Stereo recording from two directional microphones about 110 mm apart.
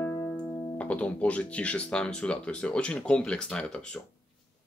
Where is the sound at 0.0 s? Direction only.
25° left (ahead or behind).